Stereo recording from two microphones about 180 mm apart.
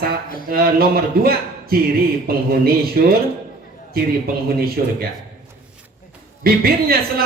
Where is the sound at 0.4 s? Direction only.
55° right (ahead or behind).